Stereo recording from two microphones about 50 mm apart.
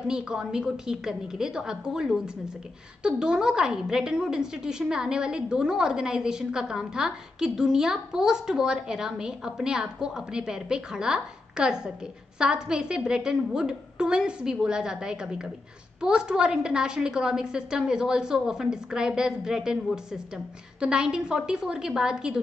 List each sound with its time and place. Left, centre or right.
0.1 s a woman's voice: centre
20.8 s a woman's voice: centre